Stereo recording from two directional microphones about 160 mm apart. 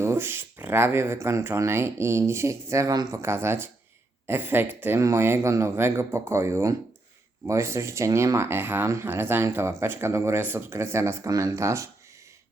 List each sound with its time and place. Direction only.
0.0 s speech: 15° right (ahead or behind)